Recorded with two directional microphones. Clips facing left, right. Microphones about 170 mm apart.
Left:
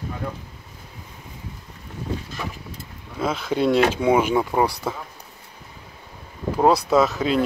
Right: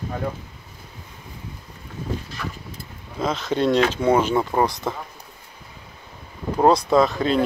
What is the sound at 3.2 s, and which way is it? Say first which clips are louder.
Speech: even; 5° left (ahead or behind).